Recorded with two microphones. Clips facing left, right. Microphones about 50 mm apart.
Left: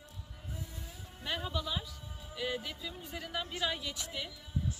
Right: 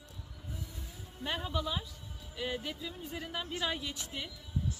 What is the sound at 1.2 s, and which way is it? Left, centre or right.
Speech, centre.